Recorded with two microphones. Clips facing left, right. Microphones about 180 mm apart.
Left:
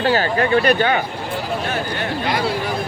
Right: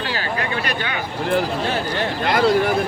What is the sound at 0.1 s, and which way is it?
Speech, 35° left (ahead or behind).